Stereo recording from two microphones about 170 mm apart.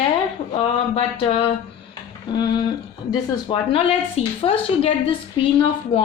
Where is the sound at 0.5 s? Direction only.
35° left (ahead or behind).